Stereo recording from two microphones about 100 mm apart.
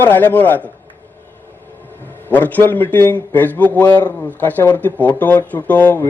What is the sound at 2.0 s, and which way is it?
A man's voice, 20° left (ahead or behind).